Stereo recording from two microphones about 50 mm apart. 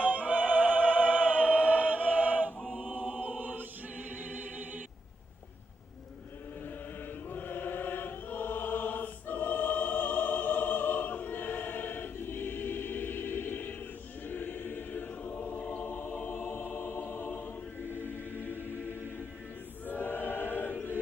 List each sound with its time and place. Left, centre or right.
0.0 s music: right
2.6 s chant: right
4.2 s music: right
7.3 s choir: left
16.2 s music: left
17.9 s choir: left